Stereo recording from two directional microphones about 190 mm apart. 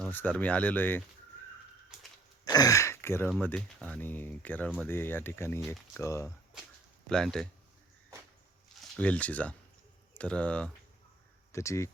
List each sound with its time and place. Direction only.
0.0 s speech: 10° left (ahead or behind)
1.9 s dog: 5° right (ahead or behind)
2.4 s throat clearing: 20° left (ahead or behind)
3.2 s speech: 5° left (ahead or behind)
6.0 s speech: 15° left (ahead or behind)
7.1 s speech: 5° left (ahead or behind)
8.8 s speech: 5° left (ahead or behind)